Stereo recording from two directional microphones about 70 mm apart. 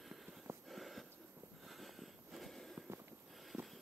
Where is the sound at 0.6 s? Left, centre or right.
Centre.